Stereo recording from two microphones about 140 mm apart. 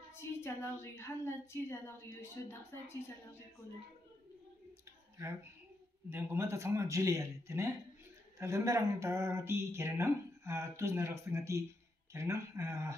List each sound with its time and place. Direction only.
0.1 s a woman's voice: 20° left (ahead or behind)
6.0 s speech: 15° right (ahead or behind)